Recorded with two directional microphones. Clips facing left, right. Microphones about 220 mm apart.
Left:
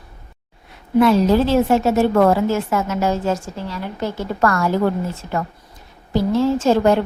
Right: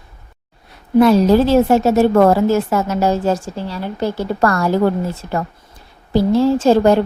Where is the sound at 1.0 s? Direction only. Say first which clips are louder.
Right 3 dB; 40° right (ahead or behind).